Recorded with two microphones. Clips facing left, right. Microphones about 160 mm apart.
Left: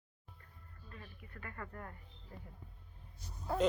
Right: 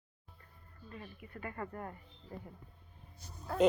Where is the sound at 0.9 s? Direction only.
20° right (ahead or behind).